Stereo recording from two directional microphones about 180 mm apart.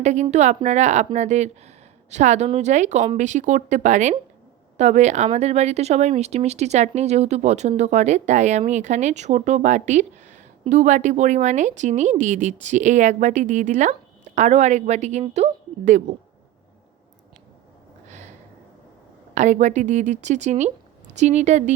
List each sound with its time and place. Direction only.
0.0 s a woman's voice: 40° right (ahead or behind)
19.3 s speech: 45° right (ahead or behind)